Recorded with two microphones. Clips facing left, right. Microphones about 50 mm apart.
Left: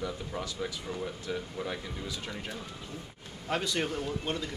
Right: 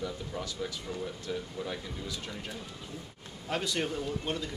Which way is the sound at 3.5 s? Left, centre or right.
Centre.